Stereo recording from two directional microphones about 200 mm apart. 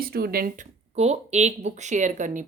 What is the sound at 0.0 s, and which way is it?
Speech, 50° right (ahead or behind).